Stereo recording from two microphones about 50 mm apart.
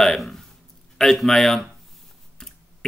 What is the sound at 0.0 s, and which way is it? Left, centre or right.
A man's voice, centre.